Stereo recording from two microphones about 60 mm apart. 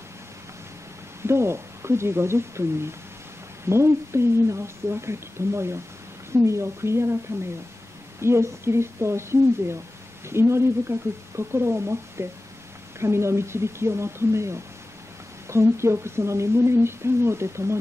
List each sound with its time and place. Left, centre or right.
1.2 s a woman's voice: right
8.2 s a woman's voice: right